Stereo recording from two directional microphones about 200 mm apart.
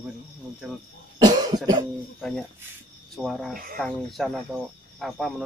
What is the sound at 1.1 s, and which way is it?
Cough, 20° right (ahead or behind).